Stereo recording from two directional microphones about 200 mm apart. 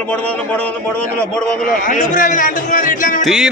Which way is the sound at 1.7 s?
40° left (ahead or behind).